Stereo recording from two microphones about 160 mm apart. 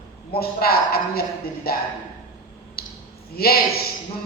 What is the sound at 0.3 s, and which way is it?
A man's voice, 70° left (ahead or behind).